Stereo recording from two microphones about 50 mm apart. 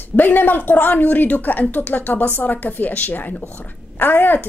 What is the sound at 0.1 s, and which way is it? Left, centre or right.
A woman's voice, left.